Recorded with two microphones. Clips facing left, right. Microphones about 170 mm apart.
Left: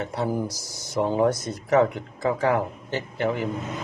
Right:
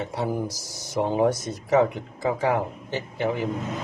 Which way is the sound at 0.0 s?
20° right (ahead or behind).